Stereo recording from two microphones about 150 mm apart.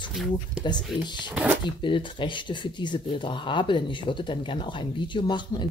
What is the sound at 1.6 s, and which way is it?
Speech, 35° left (ahead or behind).